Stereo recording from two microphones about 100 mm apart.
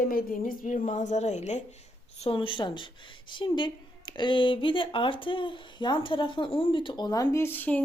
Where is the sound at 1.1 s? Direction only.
90° left.